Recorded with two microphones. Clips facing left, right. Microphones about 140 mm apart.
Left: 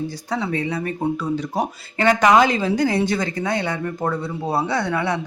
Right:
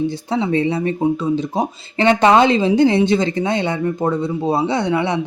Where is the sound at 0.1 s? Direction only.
25° right (ahead or behind).